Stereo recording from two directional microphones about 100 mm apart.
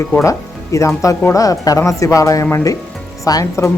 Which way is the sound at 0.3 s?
30° left (ahead or behind).